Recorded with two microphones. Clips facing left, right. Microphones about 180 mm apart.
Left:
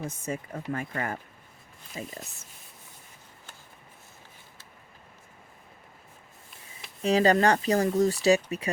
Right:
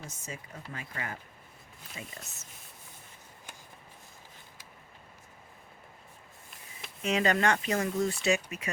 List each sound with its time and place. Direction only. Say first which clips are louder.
0.0 s speech: left 10 dB; 55° left (ahead or behind)
2.0 s speech: left 7 dB; 35° left (ahead or behind)
7.0 s speech: left 6 dB; 35° left (ahead or behind)